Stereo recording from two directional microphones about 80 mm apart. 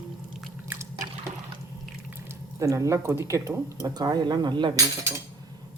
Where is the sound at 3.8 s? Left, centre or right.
Right.